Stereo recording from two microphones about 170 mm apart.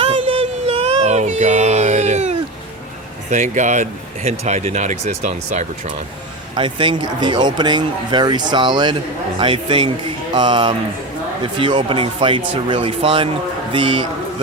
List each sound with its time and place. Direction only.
0.0 s a sound: 35° right (ahead or behind)
3.2 s speech: 45° right (ahead or behind)
6.6 s a man's voice: 30° right (ahead or behind)